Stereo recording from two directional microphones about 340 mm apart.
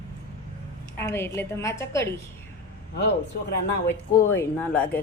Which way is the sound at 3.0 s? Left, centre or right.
Left.